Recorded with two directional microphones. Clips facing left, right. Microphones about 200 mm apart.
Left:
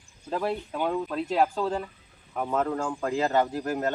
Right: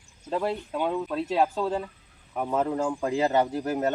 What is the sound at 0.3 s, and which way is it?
Speech, centre (ahead or behind).